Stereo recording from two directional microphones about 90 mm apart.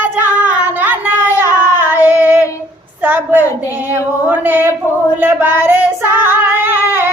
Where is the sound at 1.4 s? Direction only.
25° right (ahead or behind).